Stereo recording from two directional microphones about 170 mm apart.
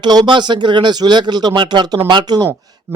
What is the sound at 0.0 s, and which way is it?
Speech, 25° right (ahead or behind).